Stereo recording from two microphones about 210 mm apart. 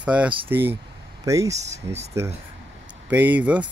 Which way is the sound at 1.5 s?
35° right (ahead or behind).